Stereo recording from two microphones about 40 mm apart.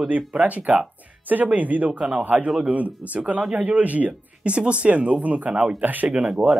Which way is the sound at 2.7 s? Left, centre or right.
Right.